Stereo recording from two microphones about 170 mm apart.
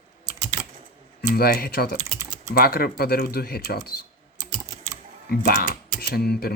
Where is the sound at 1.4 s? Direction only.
65° left (ahead or behind).